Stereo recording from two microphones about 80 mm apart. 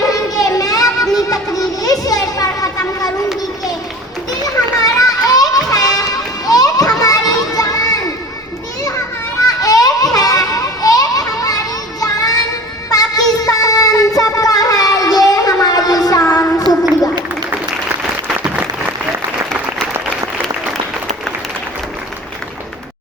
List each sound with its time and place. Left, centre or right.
0.1 s a sound: left
4.9 s children playing: left
9.5 s children playing: left
12.9 s child singing: left
18.4 s applause: centre